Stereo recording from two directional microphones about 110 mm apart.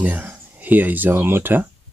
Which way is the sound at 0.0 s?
15° right (ahead or behind).